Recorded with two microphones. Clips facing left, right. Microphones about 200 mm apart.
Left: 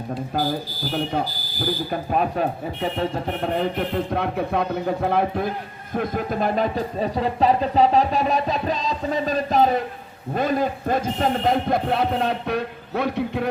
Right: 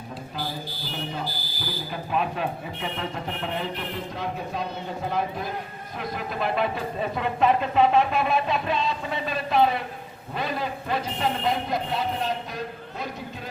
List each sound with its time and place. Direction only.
1.1 s speech: 45° left (ahead or behind)
3.5 s a man's voice: 50° left (ahead or behind)
6.0 s a man's voice: 45° left (ahead or behind); by 13.5 s 65° left (ahead or behind)